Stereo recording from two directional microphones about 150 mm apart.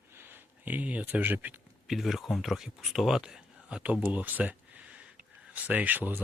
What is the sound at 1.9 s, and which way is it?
Speech, centre (ahead or behind).